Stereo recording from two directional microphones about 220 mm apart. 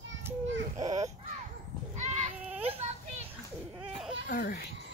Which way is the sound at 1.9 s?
30° right (ahead or behind).